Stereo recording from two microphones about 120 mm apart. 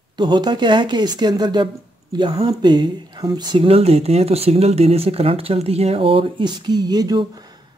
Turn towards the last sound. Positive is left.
turn(degrees=-35)  # may be behind; listen again after turning